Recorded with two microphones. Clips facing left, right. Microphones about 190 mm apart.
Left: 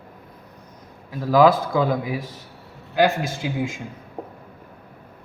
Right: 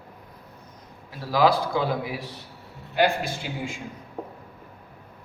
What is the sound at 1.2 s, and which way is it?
A man's voice, 45° left (ahead or behind).